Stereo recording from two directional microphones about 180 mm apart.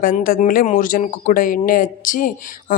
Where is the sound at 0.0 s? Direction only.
50° left (ahead or behind).